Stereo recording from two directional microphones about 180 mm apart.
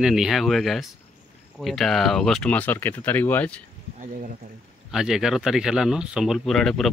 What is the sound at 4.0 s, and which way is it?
Speech, 45° right (ahead or behind).